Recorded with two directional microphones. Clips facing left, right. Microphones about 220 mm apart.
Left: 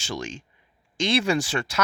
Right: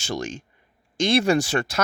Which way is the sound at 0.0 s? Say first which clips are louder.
Right 3 dB; 45° right (ahead or behind).